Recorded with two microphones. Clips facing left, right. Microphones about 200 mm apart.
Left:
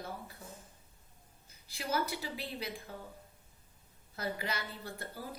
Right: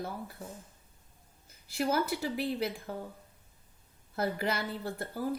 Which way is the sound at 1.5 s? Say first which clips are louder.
Right 6 dB; 50° right (ahead or behind).